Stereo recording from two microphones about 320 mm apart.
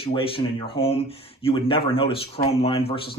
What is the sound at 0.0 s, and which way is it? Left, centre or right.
Speech, centre.